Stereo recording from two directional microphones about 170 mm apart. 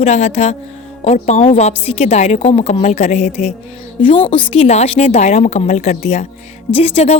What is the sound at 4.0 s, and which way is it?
A woman's voice, 30° left (ahead or behind).